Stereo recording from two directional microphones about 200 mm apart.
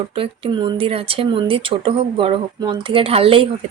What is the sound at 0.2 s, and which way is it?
Speech, 25° right (ahead or behind).